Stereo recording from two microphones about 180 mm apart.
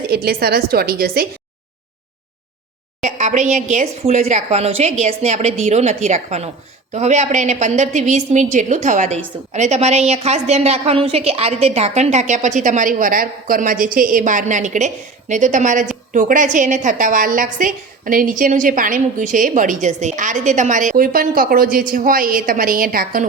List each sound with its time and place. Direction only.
0.1 s a woman's voice: 60° right (ahead or behind)
3.0 s a woman's voice: 40° right (ahead or behind)